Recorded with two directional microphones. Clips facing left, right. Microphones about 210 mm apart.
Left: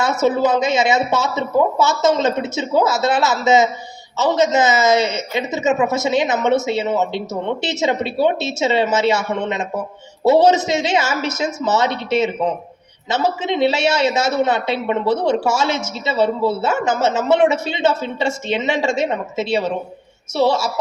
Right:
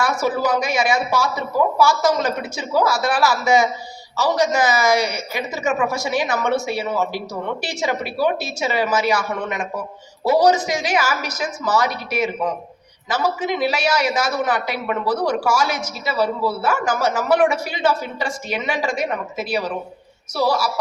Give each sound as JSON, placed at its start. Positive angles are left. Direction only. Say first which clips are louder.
{"t": 0.0, "sound": "a man's voice", "louder": "left 4 dB", "side_deg": 25}